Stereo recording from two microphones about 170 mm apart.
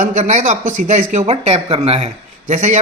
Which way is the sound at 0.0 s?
45° right (ahead or behind).